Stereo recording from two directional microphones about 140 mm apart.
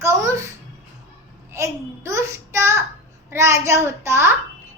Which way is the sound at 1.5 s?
20° right (ahead or behind).